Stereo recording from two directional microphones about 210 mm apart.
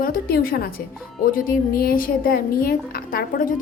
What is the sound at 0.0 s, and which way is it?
Speech, 45° left (ahead or behind).